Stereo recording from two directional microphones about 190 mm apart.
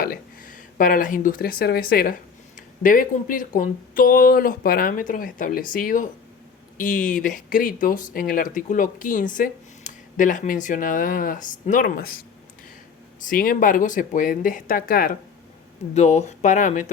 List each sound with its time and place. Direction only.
0.0 s speech: 50° left (ahead or behind)
13.2 s speech: 50° left (ahead or behind)
16.0 s speech: 35° left (ahead or behind)